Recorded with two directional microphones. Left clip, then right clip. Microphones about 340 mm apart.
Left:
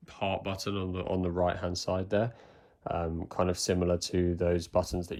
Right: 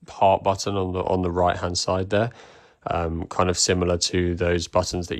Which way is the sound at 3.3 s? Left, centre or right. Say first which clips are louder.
Right 9 dB; centre.